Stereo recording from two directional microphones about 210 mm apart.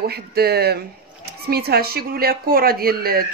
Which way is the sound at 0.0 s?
50° right (ahead or behind).